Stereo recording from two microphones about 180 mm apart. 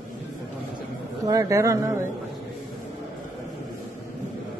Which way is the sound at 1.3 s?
20° right (ahead or behind).